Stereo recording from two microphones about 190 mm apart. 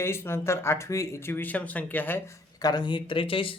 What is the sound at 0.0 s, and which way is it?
Speech, 15° left (ahead or behind).